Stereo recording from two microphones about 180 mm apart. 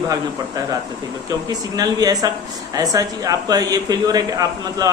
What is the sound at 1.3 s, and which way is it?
A man's voice, 20° right (ahead or behind).